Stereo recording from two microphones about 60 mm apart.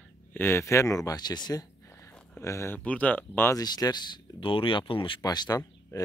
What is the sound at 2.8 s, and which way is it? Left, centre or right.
Speech, left.